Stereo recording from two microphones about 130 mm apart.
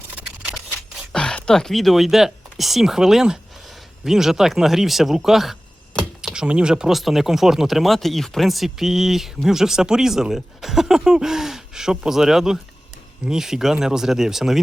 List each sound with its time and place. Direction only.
0.2 s single-lens reflex camera: 10° right (ahead or behind)
1.1 s speech: 5° left (ahead or behind)